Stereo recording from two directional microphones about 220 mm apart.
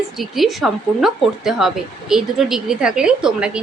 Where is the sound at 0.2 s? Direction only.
Centre (ahead or behind).